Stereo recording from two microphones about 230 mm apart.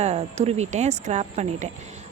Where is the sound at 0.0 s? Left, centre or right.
Right.